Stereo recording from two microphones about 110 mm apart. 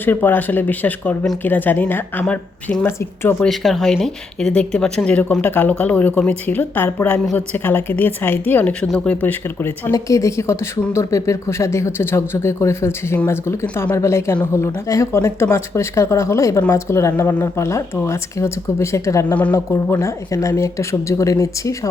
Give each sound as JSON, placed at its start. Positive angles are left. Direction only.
{"t": 0.0, "sound": "speech", "side_deg": 20}
{"t": 3.4, "sound": "speech", "side_deg": 0}
{"t": 19.3, "sound": "speech", "side_deg": 15}
{"t": 19.5, "sound": "speech", "side_deg": 25}